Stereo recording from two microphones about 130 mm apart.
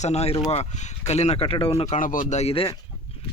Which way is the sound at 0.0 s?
55° left (ahead or behind).